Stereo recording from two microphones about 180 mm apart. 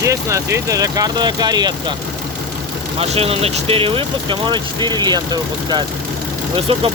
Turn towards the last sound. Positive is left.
turn(degrees=-30)  # may be behind; listen again after turning